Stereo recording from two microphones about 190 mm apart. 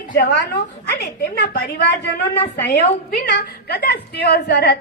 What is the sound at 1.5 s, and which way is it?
A woman's voice, 60° left (ahead or behind).